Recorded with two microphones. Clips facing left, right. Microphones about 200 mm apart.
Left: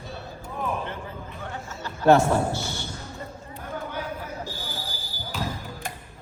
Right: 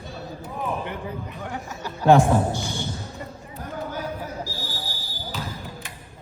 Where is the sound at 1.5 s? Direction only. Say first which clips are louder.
Right 3 dB; 15° right (ahead or behind).